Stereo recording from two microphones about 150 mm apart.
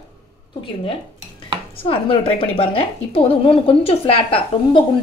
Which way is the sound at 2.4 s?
40° left (ahead or behind).